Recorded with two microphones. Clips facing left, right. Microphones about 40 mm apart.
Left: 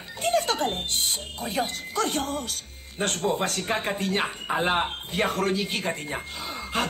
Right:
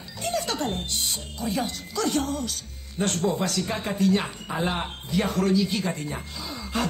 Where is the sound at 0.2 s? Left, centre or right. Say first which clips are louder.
Left 3 dB; left.